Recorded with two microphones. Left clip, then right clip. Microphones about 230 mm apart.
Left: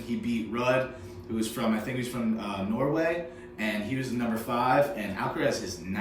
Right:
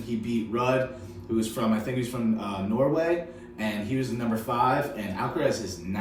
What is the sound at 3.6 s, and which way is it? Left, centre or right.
Speech, centre.